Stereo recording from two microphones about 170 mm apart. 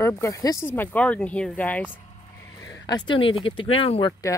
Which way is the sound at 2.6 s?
20° left (ahead or behind).